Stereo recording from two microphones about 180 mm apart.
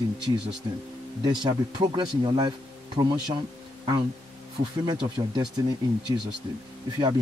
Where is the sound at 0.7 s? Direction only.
20° right (ahead or behind).